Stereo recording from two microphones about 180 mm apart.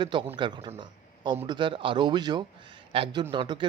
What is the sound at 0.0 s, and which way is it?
A man's voice, 25° right (ahead or behind).